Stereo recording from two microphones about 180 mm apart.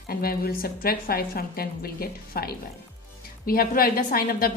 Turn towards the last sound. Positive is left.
turn(degrees=55)  # may be behind; listen again after turning